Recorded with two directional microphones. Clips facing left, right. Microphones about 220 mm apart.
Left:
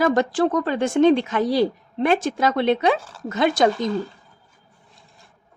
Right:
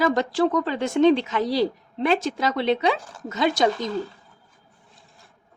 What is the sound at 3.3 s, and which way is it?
Speech, 55° left (ahead or behind).